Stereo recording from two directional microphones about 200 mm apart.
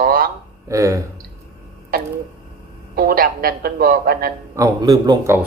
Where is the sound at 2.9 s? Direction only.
50° right (ahead or behind).